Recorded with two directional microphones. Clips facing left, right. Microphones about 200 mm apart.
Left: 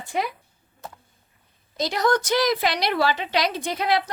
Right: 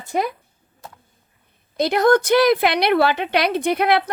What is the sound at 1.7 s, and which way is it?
A woman's voice, 55° right (ahead or behind).